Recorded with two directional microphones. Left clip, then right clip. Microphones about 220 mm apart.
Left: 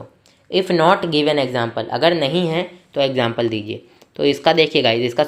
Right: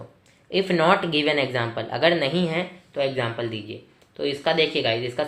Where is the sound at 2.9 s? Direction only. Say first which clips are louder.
Left 7 dB; 50° left (ahead or behind).